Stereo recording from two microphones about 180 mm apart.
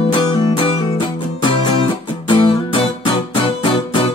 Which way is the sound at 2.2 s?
30° left (ahead or behind).